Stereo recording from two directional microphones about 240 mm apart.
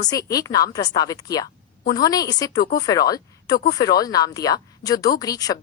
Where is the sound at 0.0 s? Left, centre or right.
Centre.